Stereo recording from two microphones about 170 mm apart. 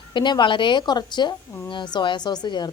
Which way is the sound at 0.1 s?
25° left (ahead or behind).